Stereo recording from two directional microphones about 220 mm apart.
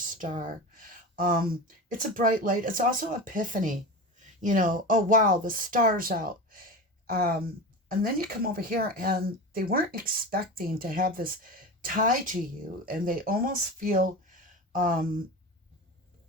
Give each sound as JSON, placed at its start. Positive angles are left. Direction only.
{"t": 0.1, "sound": "speech", "side_deg": -35}